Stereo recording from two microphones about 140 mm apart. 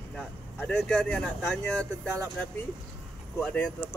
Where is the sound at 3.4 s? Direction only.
5° left (ahead or behind).